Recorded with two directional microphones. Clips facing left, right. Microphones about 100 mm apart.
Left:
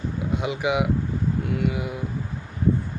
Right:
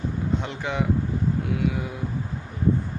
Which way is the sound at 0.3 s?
10° left (ahead or behind).